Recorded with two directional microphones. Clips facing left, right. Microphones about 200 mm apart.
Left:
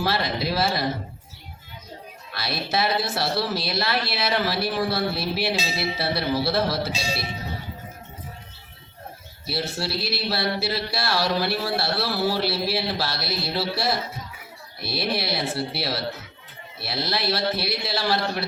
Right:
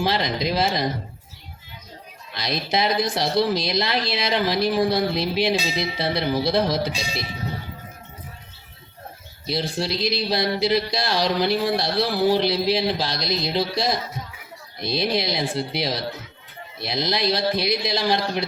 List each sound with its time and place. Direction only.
0.0 s speech: 15° right (ahead or behind)
2.3 s speech: 15° right (ahead or behind)
9.5 s speech: 15° right (ahead or behind)